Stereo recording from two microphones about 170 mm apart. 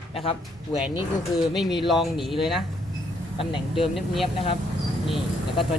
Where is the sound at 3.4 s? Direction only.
30° left (ahead or behind).